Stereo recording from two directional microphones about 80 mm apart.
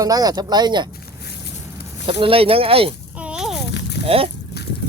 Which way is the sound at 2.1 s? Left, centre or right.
Right.